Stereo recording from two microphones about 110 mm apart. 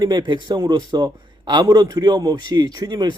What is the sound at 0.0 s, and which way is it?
A man's voice, 40° right (ahead or behind).